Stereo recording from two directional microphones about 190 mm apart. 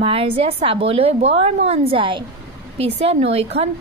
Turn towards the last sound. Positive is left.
turn(degrees=-30)  # may be behind; listen again after turning